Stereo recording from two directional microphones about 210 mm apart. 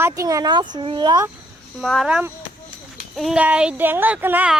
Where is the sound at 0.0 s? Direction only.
15° right (ahead or behind).